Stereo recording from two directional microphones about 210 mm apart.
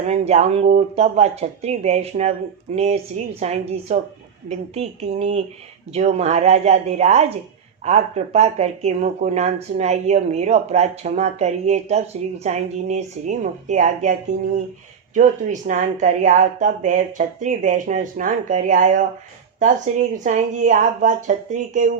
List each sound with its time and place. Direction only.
0.1 s speech: 30° right (ahead or behind)